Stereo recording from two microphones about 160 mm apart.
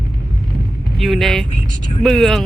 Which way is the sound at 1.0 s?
Centre (ahead or behind).